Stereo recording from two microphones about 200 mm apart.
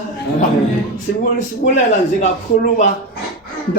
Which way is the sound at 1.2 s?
40° left (ahead or behind).